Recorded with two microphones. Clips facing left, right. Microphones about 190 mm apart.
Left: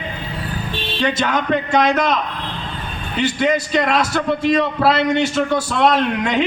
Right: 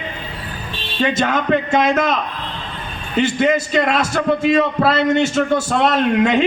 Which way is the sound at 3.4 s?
50° right (ahead or behind).